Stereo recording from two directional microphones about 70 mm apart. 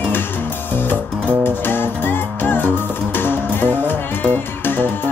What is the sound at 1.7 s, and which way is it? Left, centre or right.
Music, left.